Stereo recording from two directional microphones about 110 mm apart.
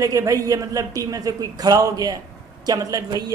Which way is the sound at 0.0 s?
30° right (ahead or behind).